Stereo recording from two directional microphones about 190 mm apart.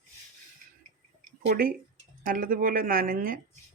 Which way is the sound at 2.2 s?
45° right (ahead or behind).